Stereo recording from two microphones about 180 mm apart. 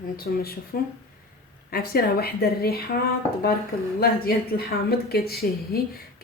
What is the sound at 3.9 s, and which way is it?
A woman's voice, 60° left (ahead or behind).